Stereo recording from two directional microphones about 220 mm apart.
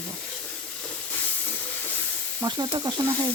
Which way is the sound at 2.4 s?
20° right (ahead or behind).